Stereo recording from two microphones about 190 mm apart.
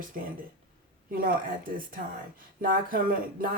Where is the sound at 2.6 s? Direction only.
50° right (ahead or behind).